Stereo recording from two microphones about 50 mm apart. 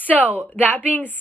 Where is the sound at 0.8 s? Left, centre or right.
Left.